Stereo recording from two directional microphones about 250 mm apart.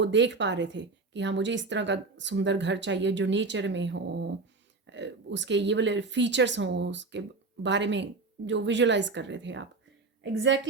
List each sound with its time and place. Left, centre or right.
0.0 s speech: right